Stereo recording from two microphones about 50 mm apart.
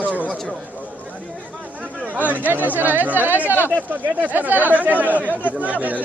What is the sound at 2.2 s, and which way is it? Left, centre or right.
Speech, right.